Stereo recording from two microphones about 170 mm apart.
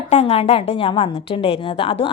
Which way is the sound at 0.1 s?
35° left (ahead or behind).